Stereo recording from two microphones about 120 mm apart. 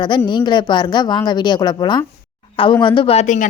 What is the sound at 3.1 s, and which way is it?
Speech, 90° left.